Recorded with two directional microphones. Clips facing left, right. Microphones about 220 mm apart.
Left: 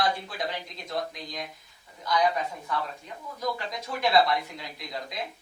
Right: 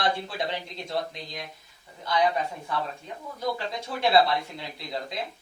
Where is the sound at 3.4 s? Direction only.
30° right (ahead or behind).